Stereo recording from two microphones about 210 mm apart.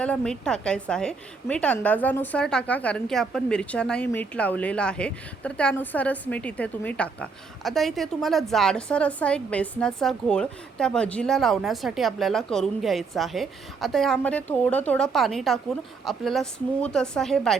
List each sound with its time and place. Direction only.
0.0 s a woman's voice: 5° left (ahead or behind)